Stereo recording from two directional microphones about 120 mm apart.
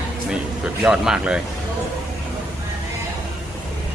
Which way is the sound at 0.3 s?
5° right (ahead or behind).